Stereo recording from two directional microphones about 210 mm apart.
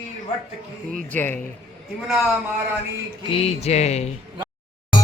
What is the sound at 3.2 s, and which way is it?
Speech, 25° left (ahead or behind).